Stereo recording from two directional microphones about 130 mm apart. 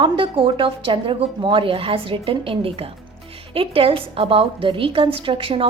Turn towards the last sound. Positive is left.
turn(degrees=-45)  # may be behind; listen again after turning